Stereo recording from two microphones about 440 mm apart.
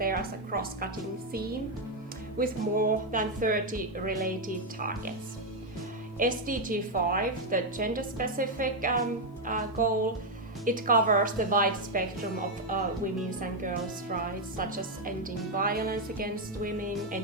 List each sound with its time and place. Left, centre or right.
0.0 s a woman's voice: centre
2.4 s a woman's voice: centre
6.1 s a woman's voice: centre
9.5 s music: centre
10.7 s a woman's voice: centre
13.4 s a woman's voice: centre